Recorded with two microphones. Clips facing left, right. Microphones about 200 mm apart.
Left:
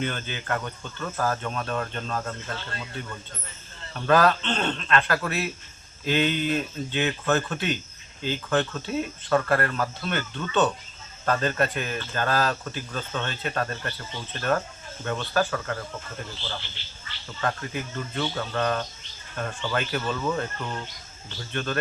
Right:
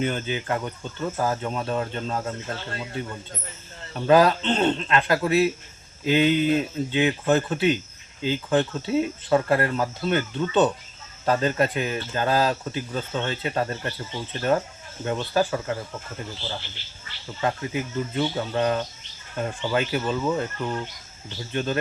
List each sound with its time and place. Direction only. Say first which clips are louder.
0.0 s speech: right 5 dB; 15° right (ahead or behind)